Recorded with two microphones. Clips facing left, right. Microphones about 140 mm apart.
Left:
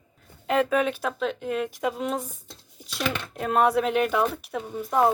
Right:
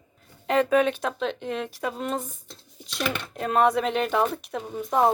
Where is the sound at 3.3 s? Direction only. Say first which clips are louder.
Even; 5° left (ahead or behind).